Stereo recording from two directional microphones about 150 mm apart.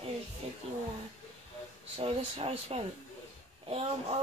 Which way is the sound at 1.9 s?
40° right (ahead or behind).